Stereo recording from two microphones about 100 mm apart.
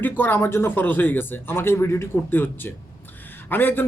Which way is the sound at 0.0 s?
20° left (ahead or behind).